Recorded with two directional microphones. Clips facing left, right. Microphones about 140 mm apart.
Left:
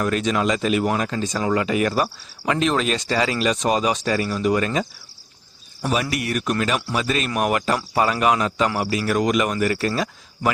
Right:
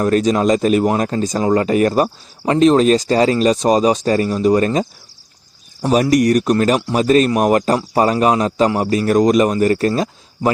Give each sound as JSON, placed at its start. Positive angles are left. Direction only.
{"t": 0.0, "sound": "speech", "side_deg": -40}
{"t": 5.9, "sound": "speech", "side_deg": -40}